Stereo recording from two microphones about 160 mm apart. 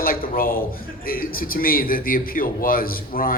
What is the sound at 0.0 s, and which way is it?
A man's voice, 65° left (ahead or behind).